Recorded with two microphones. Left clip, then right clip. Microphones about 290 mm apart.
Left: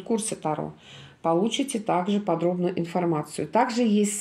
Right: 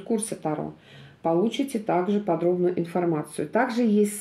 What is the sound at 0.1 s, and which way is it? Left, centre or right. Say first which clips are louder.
Speech: left 1 dB; left.